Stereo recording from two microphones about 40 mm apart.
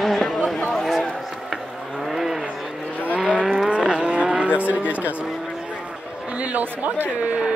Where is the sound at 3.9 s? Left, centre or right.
Right.